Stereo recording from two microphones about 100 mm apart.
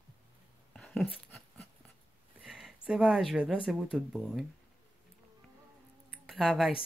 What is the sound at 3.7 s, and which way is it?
Speech, 10° right (ahead or behind).